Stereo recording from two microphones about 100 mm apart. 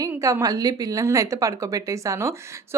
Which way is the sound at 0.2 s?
35° right (ahead or behind).